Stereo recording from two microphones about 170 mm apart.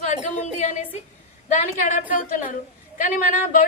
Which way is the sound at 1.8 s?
50° left (ahead or behind).